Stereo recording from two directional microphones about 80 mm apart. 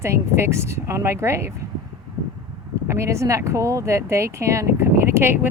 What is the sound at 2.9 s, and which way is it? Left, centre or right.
Speech, right.